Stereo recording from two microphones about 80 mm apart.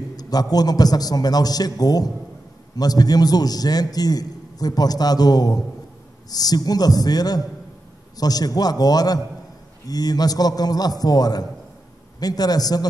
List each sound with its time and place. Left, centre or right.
0.1 s a man's voice: left